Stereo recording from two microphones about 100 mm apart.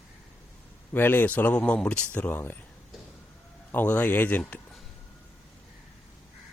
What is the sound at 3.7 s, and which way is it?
Speech, 15° left (ahead or behind).